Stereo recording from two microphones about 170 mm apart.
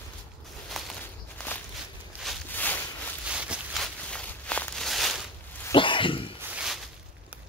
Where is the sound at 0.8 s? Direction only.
Centre (ahead or behind).